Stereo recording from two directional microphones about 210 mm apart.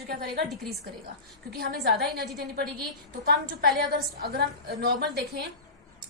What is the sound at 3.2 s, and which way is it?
A woman's voice, 45° right (ahead or behind).